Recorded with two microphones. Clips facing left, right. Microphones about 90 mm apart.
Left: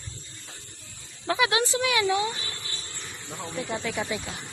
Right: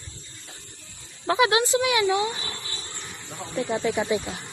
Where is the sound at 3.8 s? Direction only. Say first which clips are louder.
Right 8 dB; 25° right (ahead or behind).